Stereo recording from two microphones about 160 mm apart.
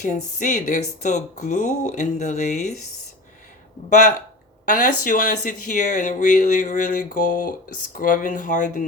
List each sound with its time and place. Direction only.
0.3 s speech: 50° left (ahead or behind)
4.6 s speech: 55° left (ahead or behind)